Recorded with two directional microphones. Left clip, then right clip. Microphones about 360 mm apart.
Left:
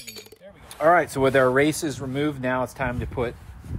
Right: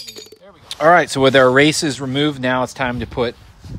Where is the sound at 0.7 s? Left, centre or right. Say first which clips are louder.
Right 6 dB; right.